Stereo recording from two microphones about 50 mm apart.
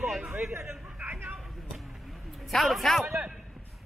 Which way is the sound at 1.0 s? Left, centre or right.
Right.